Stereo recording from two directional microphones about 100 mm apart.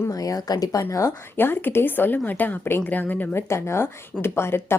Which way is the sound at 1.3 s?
20° left (ahead or behind).